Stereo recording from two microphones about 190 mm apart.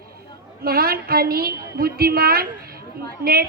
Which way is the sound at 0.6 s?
50° right (ahead or behind).